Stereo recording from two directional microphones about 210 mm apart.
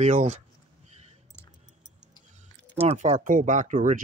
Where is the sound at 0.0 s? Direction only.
35° right (ahead or behind).